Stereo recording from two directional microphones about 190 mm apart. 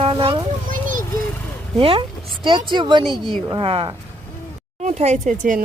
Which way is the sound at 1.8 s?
30° right (ahead or behind).